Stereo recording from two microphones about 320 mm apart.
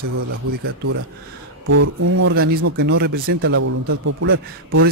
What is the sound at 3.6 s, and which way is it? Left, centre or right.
Speech, right.